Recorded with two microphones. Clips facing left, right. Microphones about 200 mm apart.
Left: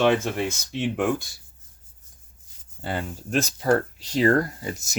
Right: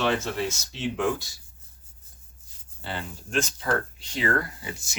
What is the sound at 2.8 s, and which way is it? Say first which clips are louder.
Speech: left 5 dB; 45° left (ahead or behind).